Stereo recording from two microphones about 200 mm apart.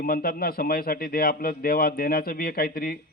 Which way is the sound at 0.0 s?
50° left (ahead or behind).